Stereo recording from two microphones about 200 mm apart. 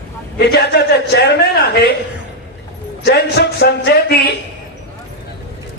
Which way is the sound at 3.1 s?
55° left (ahead or behind).